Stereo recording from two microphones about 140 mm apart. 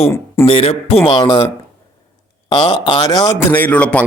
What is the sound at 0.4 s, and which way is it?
Speech, 40° left (ahead or behind).